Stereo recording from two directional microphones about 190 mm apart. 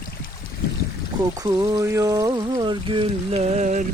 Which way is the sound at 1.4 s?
15° right (ahead or behind).